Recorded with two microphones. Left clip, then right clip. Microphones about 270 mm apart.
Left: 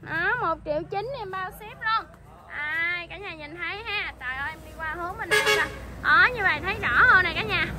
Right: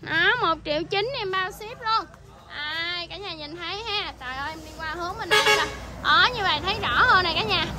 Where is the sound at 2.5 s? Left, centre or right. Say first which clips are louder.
Left 2 dB; centre.